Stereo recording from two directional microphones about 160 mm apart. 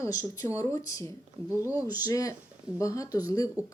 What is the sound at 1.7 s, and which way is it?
Speech, 10° right (ahead or behind).